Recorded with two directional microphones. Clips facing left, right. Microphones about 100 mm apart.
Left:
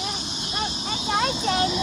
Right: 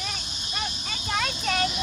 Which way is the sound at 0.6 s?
30° left (ahead or behind).